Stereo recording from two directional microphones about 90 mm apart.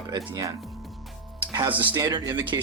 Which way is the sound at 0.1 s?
40° right (ahead or behind).